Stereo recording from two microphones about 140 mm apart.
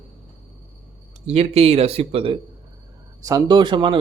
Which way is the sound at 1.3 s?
50° right (ahead or behind).